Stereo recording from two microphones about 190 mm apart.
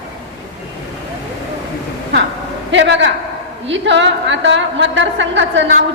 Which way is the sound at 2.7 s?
70° right (ahead or behind).